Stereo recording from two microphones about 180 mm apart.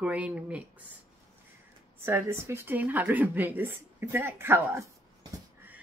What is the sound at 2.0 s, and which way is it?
Speech, 15° right (ahead or behind).